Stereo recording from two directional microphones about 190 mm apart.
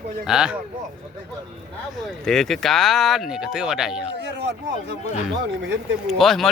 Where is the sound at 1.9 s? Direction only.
Centre (ahead or behind).